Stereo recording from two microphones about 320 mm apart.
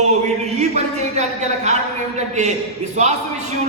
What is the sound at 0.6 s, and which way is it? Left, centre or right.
Speech, right.